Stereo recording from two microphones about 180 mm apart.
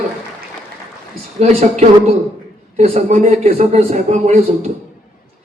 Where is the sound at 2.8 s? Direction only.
40° right (ahead or behind).